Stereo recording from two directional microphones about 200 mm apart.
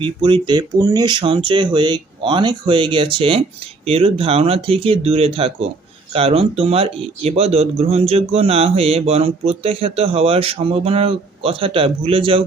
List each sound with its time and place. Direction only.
0.0 s speech: 25° right (ahead or behind)